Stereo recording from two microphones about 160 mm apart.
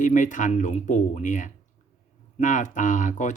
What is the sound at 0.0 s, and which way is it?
Speech, 50° left (ahead or behind).